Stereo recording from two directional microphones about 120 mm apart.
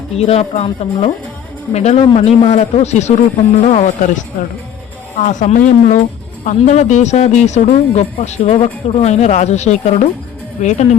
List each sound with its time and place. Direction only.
0.1 s speech: 60° left (ahead or behind); by 4.2 s 80° left
5.2 s speech: 90° left; by 10.1 s 70° left (ahead or behind)
10.6 s speech: 80° left